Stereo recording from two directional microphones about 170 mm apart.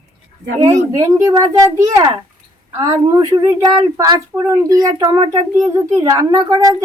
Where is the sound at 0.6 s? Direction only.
20° right (ahead or behind).